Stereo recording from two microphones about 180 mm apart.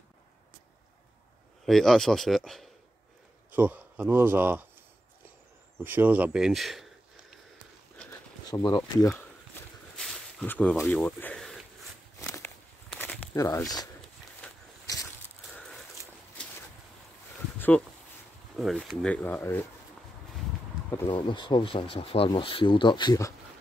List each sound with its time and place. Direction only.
1.7 s speech: centre (ahead or behind)
3.5 s speech: 10° right (ahead or behind)
5.9 s speech: 10° right (ahead or behind)
8.5 s speech: 25° left (ahead or behind)
9.9 s a sound: 5° left (ahead or behind)
12.2 s walk: 15° left (ahead or behind)
13.4 s speech: 20° left (ahead or behind)
15.4 s a sound: centre (ahead or behind)
17.6 s a sound: 10° left (ahead or behind)
18.6 s speech: centre (ahead or behind)
20.9 s speech: 20° left (ahead or behind)